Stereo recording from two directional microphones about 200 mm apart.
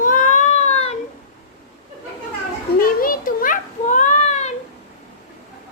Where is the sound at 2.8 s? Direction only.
45° left (ahead or behind).